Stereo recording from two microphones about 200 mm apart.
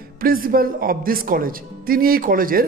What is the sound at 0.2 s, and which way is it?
A man's voice, 45° right (ahead or behind).